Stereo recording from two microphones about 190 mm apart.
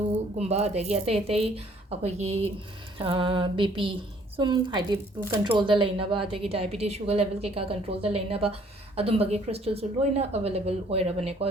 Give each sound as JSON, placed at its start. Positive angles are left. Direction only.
{"t": 0.3, "sound": "speech", "side_deg": -35}
{"t": 3.0, "sound": "music", "side_deg": -25}
{"t": 5.5, "sound": "speech", "side_deg": -25}